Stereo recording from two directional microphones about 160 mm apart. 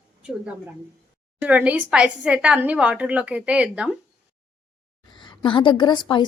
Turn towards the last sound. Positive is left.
turn(degrees=30)  # may be behind; listen again after turning